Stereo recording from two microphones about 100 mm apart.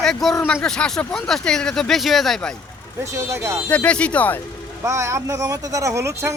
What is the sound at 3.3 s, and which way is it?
Speech, 30° right (ahead or behind).